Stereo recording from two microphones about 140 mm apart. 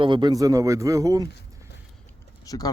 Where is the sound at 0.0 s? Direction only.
30° right (ahead or behind).